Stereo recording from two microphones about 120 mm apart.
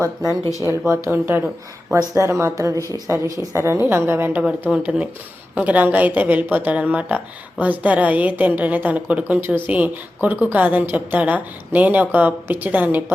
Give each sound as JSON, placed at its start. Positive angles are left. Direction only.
{"t": 0.0, "sound": "a woman's voice", "side_deg": -25}